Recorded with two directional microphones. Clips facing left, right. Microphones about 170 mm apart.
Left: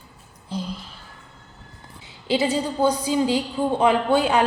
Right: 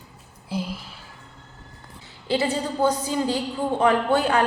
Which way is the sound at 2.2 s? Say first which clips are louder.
Left 2 dB; 15° left (ahead or behind).